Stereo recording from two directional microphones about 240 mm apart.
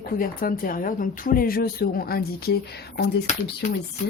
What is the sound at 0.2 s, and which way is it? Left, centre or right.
Speech, left.